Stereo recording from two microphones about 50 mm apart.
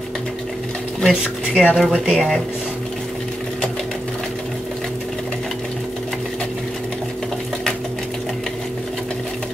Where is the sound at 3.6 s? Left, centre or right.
Centre.